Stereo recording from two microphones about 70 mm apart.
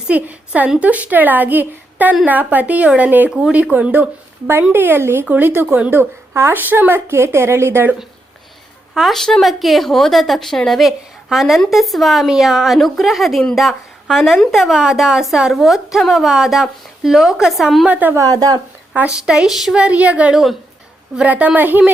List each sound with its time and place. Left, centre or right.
0.1 s speech: right
3.2 s speech: centre
3.5 s a woman's voice: right
5.9 s a woman's voice: right
9.0 s a woman's voice: centre
17.8 s speech: right
18.1 s a woman's voice: right
18.9 s speech: centre
19.8 s speech: centre